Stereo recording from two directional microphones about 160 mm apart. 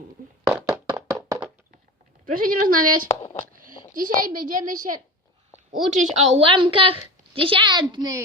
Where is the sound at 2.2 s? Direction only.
60° right (ahead or behind).